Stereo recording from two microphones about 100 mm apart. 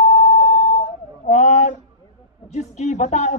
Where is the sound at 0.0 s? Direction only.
90° left.